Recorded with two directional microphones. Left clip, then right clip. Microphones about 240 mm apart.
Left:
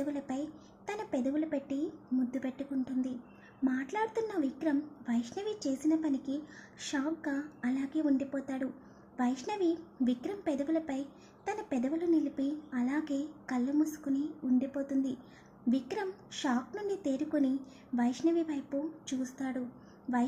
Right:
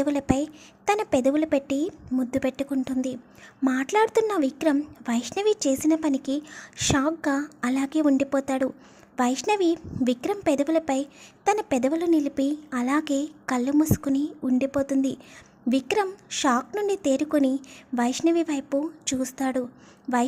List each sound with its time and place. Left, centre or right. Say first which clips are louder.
0.0 s a woman's voice: right 12 dB; right